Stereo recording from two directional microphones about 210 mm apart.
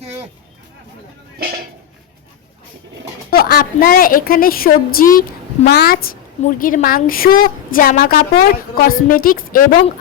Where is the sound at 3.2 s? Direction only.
45° left (ahead or behind).